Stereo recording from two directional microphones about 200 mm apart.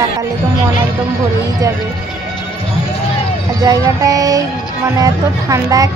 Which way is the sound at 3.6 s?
15° right (ahead or behind).